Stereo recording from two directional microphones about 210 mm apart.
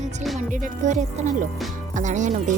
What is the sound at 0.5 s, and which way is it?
Speech, 35° right (ahead or behind).